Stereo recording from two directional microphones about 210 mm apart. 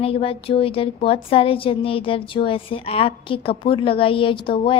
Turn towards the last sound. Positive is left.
turn(degrees=25)  # may be behind; listen again after turning